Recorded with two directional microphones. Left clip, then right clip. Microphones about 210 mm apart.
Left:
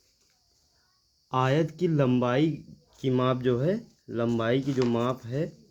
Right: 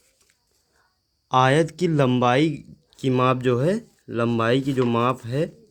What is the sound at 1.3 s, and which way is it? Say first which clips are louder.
Speech: right 8 dB; 30° right (ahead or behind).